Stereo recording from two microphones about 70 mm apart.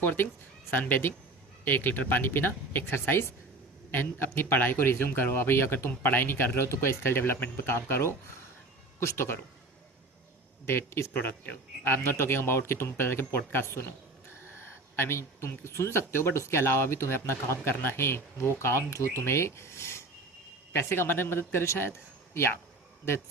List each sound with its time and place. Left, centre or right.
0.0 s speech: left
10.7 s speech: left
14.9 s speech: left